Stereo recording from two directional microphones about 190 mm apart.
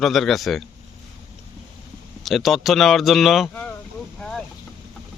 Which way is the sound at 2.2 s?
Centre (ahead or behind).